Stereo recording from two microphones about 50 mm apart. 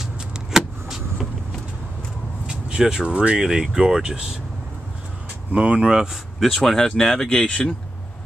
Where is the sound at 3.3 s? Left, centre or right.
Centre.